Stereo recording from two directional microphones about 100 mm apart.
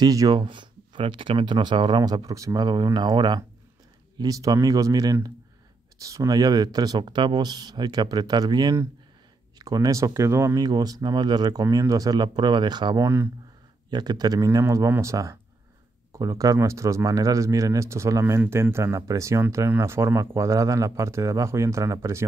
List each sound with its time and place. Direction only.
0.0 s speech: 40° right (ahead or behind)
0.4 s speech: 55° right (ahead or behind)
11.6 s speech: 35° right (ahead or behind)
13.0 s speech: 25° right (ahead or behind)
13.8 s speech: 45° right (ahead or behind)